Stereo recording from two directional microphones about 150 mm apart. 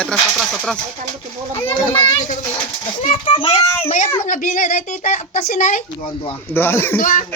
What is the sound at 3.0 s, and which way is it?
Speech, 40° left (ahead or behind).